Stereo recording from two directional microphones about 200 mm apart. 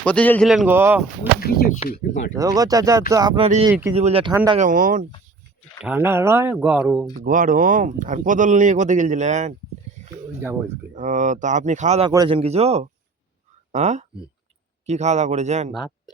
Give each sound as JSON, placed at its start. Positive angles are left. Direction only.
{"t": 0.0, "sound": "speech", "side_deg": 5}
{"t": 1.4, "sound": "speech", "side_deg": 50}
{"t": 2.3, "sound": "speech", "side_deg": -15}
{"t": 4.5, "sound": "speech", "side_deg": -40}
{"t": 5.8, "sound": "speech", "side_deg": -10}
{"t": 7.3, "sound": "speech", "side_deg": -45}
{"t": 10.9, "sound": "speech", "side_deg": -40}